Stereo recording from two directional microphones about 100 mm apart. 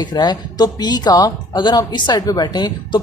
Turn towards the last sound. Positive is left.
turn(degrees=50)  # may be behind; listen again after turning